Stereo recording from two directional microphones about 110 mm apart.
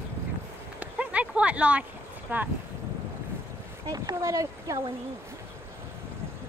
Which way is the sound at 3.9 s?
30° right (ahead or behind).